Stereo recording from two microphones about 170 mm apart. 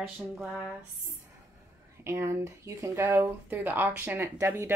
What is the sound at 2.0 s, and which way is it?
Speech, 15° right (ahead or behind).